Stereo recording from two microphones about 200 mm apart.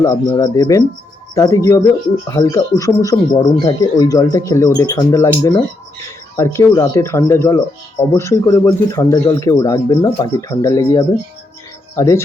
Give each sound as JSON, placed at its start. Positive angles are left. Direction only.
{"t": 0.0, "sound": "speech", "side_deg": 20}